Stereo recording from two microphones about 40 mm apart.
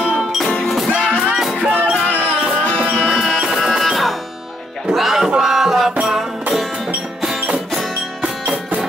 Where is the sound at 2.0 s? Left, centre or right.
Left.